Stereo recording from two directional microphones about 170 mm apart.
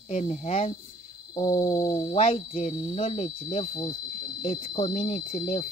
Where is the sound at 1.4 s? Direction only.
20° left (ahead or behind).